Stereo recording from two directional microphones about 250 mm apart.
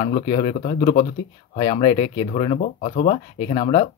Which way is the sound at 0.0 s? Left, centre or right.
Left.